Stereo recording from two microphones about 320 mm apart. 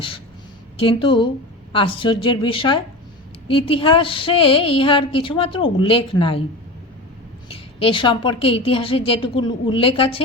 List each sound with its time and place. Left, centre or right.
0.8 s speech: centre
7.4 s speech: centre